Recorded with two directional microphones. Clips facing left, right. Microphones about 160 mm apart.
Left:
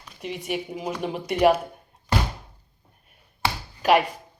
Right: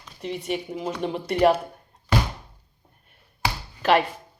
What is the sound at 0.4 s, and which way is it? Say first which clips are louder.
A woman's voice: even; 5° left (ahead or behind).